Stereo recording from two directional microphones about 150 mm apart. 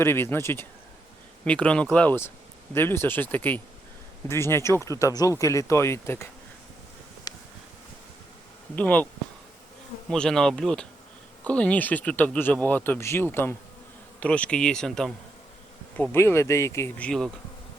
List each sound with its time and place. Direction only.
0.0 s speech: 15° left (ahead or behind)
7.3 s a sound: 25° left (ahead or behind)
8.7 s speech: 10° left (ahead or behind)
10.1 s speech: 5° left (ahead or behind)
16.1 s speech: 15° left (ahead or behind)
17.1 s speech: 5° left (ahead or behind)